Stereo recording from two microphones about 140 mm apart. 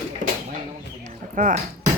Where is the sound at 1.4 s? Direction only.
70° right (ahead or behind).